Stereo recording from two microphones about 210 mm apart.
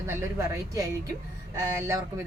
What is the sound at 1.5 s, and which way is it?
Speech, 15° right (ahead or behind).